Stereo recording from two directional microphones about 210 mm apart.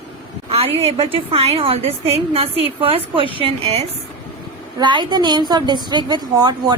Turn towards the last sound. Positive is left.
turn(degrees=-20)  # may be behind; listen again after turning